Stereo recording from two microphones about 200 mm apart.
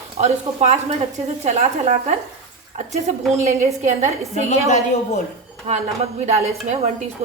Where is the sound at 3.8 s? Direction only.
35° right (ahead or behind).